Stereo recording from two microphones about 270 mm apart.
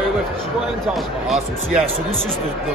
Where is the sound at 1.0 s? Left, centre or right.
Centre.